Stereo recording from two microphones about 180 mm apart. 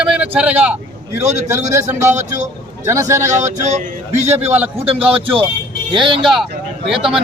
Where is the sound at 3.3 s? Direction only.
40° right (ahead or behind).